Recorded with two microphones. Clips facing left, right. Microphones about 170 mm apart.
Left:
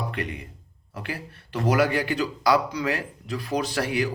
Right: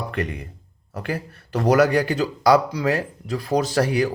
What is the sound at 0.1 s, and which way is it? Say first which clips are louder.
Speech: right 5 dB; 45° right (ahead or behind).